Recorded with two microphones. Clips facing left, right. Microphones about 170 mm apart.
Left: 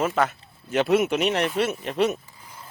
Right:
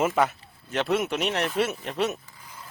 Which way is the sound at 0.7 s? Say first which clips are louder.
Left 5 dB; 5° left (ahead or behind).